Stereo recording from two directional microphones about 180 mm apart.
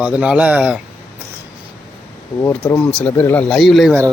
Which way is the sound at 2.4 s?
15° left (ahead or behind).